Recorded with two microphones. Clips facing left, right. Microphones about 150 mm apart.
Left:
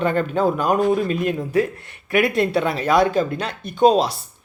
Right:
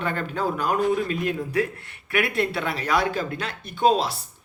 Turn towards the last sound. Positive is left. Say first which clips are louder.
# left 5 dB
turn(degrees=20)  # may be behind; listen again after turning